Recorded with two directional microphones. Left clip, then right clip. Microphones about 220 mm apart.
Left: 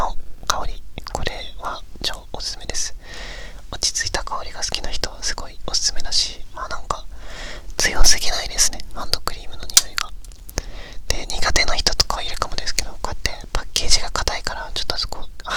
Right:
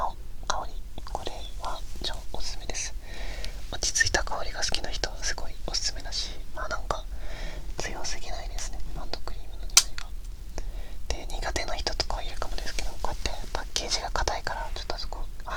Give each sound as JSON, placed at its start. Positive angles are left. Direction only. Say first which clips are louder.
{"t": 0.0, "sound": "whispering", "louder": "left 7 dB", "side_deg": 40}
{"t": 6.6, "sound": "whispering", "louder": "left 5 dB", "side_deg": 15}
{"t": 7.3, "sound": "whispering", "louder": "left 8 dB", "side_deg": 30}
{"t": 7.8, "sound": "whispering", "louder": "left 17 dB", "side_deg": 50}
{"t": 10.5, "sound": "whispering", "louder": "left 12 dB", "side_deg": 40}